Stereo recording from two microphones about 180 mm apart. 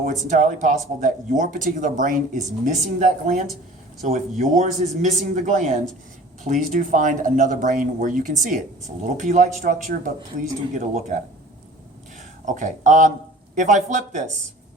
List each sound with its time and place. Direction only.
0.0 s speech: 45° right (ahead or behind)
12.5 s speech: 45° right (ahead or behind)